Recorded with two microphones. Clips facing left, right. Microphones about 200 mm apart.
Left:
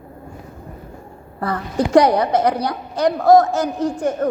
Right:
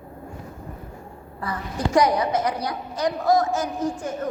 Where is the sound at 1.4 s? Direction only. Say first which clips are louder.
Left 7 dB; 65° left (ahead or behind).